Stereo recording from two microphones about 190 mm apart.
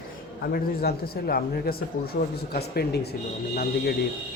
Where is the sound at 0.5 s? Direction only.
55° left (ahead or behind).